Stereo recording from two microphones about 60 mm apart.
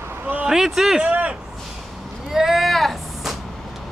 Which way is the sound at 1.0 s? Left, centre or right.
Right.